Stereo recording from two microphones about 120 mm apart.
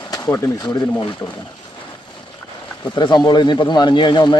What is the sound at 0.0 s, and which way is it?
Speech, 30° left (ahead or behind).